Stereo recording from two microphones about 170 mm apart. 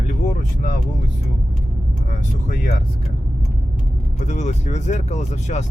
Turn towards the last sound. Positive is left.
turn(degrees=45)  # may be behind; listen again after turning